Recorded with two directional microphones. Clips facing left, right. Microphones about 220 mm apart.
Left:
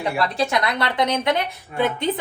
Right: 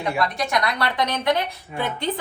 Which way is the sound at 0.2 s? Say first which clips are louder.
Left 3 dB; 25° left (ahead or behind).